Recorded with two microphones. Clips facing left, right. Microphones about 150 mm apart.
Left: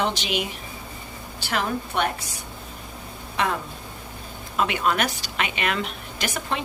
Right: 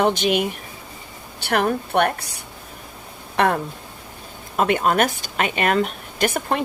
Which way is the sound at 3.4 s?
60° right (ahead or behind).